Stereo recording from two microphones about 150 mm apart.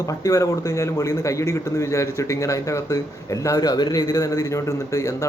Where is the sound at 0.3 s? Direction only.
20° left (ahead or behind).